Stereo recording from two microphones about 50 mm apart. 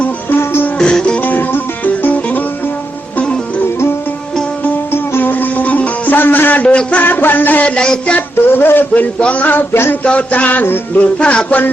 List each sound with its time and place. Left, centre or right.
0.3 s music: left
0.8 s music: centre
1.2 s music: left
4.9 s music: left
7.6 s music: centre
8.5 s a man's voice: left
9.1 s music: left
9.9 s music: left
11.0 s music: centre
11.4 s music: left